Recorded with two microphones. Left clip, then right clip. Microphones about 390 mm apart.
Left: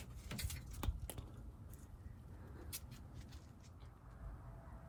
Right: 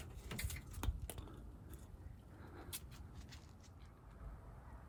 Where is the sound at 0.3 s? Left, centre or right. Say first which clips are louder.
Right 1 dB; centre.